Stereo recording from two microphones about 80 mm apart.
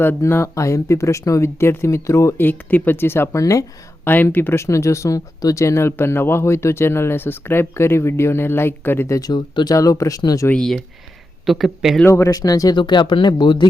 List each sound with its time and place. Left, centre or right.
0.0 s speech: left
2.4 s speech: left
3.3 s speech: left
4.0 s speech: left
9.3 s speech: left
9.7 s speech: left
10.5 s speech: centre
12.0 s speech: left
12.3 s speech: left
12.7 s speech: left